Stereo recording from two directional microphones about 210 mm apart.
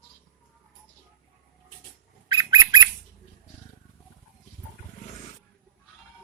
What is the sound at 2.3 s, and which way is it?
Bird, 20° right (ahead or behind).